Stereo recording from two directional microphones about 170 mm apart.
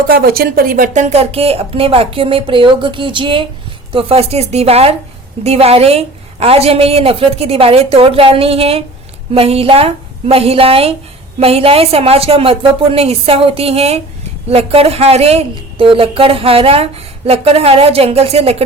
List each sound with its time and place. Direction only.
0.1 s speech: 60° right (ahead or behind); by 18.5 s 35° right (ahead or behind)